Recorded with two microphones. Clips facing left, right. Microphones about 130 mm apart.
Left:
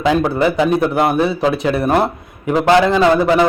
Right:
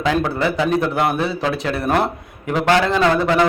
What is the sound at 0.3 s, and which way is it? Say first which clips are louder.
Speech: left 4 dB; 15° left (ahead or behind).